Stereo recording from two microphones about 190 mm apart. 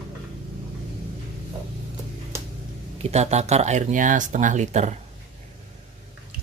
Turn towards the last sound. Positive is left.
turn(degrees=-35)  # may be behind; listen again after turning